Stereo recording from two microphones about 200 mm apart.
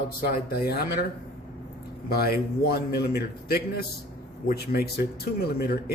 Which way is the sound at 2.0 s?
50° left (ahead or behind).